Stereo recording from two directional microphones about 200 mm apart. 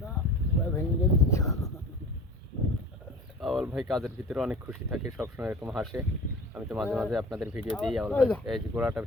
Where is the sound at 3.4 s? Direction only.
5° right (ahead or behind).